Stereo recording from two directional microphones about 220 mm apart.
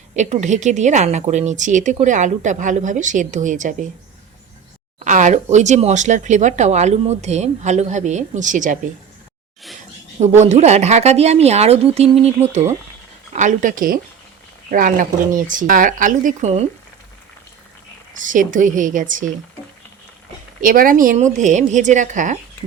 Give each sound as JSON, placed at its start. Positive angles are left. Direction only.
{"t": 0.2, "sound": "speech", "side_deg": -30}
{"t": 4.9, "sound": "speech", "side_deg": -35}
{"t": 10.2, "sound": "speech", "side_deg": -30}
{"t": 18.2, "sound": "speech", "side_deg": -35}
{"t": 20.6, "sound": "speech", "side_deg": -40}